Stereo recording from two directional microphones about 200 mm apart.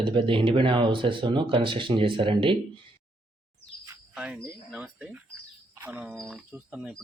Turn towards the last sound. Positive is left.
turn(degrees=-5)  # may be behind; listen again after turning